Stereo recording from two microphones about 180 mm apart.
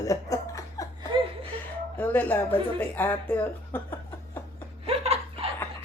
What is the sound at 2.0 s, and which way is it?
Speech, 10° left (ahead or behind).